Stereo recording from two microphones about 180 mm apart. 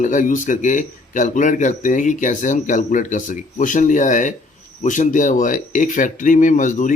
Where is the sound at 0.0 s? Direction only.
45° left (ahead or behind).